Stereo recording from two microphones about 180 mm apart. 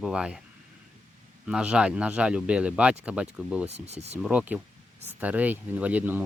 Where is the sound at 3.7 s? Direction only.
35° right (ahead or behind).